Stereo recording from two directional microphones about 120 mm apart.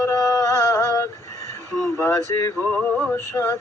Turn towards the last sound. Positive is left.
turn(degrees=20)  # may be behind; listen again after turning